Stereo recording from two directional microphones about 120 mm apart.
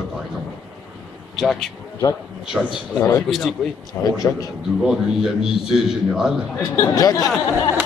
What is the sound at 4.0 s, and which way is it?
Speech, 20° left (ahead or behind).